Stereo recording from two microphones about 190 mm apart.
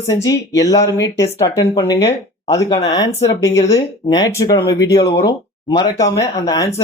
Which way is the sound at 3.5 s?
15° left (ahead or behind).